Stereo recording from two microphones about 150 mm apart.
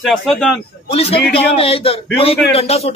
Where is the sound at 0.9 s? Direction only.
40° left (ahead or behind).